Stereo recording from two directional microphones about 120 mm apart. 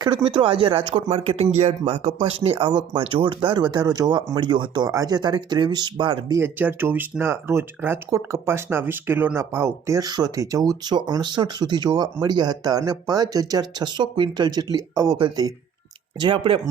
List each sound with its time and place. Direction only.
0.3 s speech: 45° right (ahead or behind)
6.3 s speech: 15° right (ahead or behind); by 15.5 s 35° right (ahead or behind)
16.2 s speech: 45° right (ahead or behind)